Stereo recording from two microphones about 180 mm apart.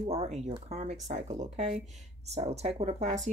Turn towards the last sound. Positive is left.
turn(degrees=-35)  # may be behind; listen again after turning